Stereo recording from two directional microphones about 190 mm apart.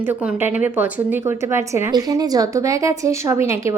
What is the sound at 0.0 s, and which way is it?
A woman's voice, 10° right (ahead or behind).